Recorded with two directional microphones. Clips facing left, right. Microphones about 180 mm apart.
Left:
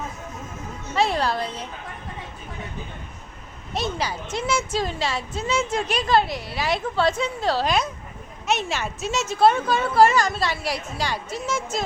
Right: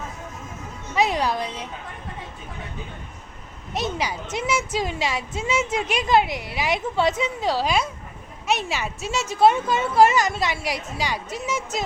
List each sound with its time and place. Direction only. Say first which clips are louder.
0.9 s a woman's voice: even; 15° right (ahead or behind)
3.8 s a woman's voice: right 1 dB; 15° right (ahead or behind)